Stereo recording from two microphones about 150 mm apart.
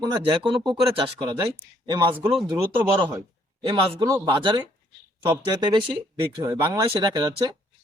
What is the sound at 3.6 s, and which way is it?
Speech, 35° right (ahead or behind).